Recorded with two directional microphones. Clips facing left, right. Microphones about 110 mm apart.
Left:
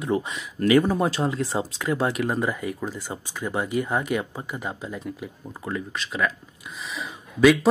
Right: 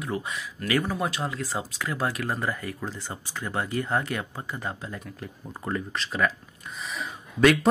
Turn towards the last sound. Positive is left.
turn(degrees=0)  # may be behind; listen again after turning